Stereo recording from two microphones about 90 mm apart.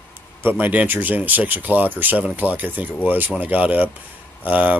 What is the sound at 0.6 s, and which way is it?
Speech, 20° right (ahead or behind).